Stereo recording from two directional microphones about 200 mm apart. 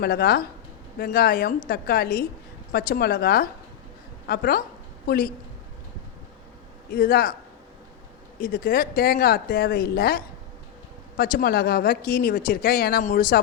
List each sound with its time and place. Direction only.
0.0 s speech: 50° left (ahead or behind)
6.9 s speech: 50° left (ahead or behind)
8.4 s speech: 45° left (ahead or behind)